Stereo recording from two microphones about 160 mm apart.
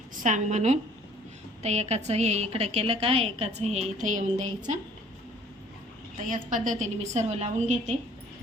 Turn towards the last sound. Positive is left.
turn(degrees=-45)  # may be behind; listen again after turning